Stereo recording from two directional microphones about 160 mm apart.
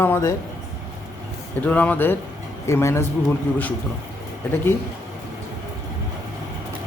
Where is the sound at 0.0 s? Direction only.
15° left (ahead or behind).